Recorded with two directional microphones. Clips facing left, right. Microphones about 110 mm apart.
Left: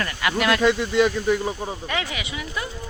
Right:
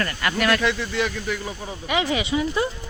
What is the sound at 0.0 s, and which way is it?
Speech, 10° left (ahead or behind).